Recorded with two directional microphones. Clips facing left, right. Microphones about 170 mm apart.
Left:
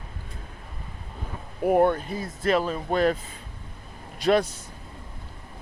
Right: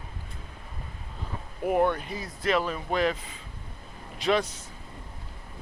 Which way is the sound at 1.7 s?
40° left (ahead or behind).